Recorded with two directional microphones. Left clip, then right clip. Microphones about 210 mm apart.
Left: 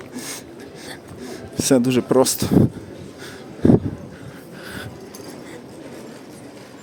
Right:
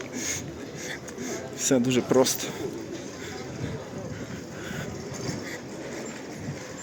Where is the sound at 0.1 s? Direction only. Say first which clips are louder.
Even; 20° left (ahead or behind).